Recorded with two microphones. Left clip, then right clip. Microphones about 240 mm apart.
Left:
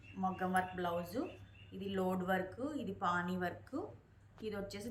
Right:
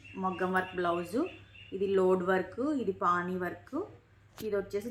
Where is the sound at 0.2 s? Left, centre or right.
Right.